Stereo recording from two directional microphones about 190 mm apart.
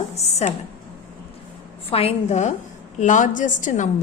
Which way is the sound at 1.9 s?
30° left (ahead or behind).